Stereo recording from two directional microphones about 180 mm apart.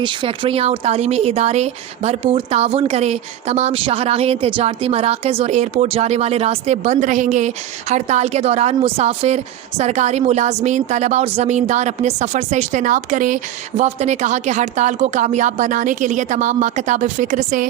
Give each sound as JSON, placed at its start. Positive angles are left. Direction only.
{"t": 0.0, "sound": "speech", "side_deg": -25}